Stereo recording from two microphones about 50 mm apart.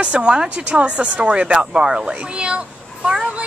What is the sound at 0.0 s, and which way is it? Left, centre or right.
Speech, centre.